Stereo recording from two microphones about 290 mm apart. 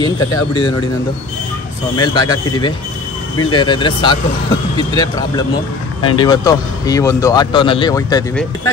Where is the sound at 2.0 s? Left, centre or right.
Centre.